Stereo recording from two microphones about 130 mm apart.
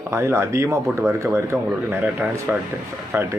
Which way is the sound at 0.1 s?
20° right (ahead or behind).